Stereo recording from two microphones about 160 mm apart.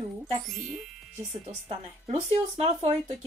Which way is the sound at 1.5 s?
40° right (ahead or behind).